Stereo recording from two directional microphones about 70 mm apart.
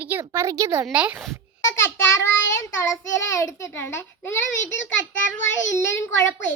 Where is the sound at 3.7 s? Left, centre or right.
Left.